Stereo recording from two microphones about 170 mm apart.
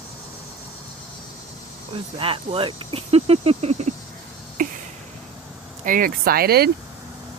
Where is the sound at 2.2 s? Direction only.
30° right (ahead or behind).